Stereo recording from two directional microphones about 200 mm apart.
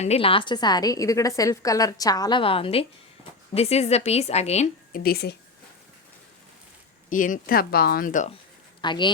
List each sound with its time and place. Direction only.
0.0 s a woman's voice: 30° left (ahead or behind); by 5.4 s 50° left (ahead or behind)
7.1 s speech: 40° left (ahead or behind)
8.8 s speech: 25° left (ahead or behind)